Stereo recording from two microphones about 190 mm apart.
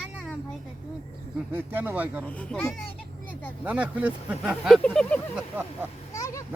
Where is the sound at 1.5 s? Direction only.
10° right (ahead or behind).